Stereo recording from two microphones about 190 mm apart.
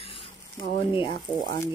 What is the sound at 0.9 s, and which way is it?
Speech, 25° left (ahead or behind).